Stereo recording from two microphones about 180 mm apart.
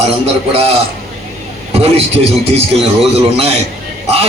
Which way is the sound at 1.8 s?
35° right (ahead or behind).